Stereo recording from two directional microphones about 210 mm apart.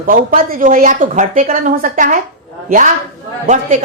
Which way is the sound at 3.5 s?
30° right (ahead or behind).